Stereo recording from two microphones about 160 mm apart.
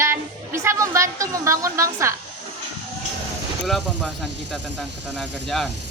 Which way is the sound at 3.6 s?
Centre (ahead or behind).